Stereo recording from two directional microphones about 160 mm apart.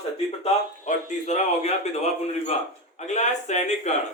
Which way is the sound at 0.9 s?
50° left (ahead or behind).